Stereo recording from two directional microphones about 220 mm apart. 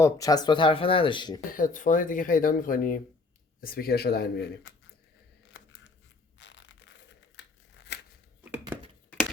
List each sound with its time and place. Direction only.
0.0 s speech: 15° left (ahead or behind)
1.5 s speech: 35° left (ahead or behind)
6.4 s crushing: 55° left (ahead or behind)
7.3 s crumpling: 50° left (ahead or behind)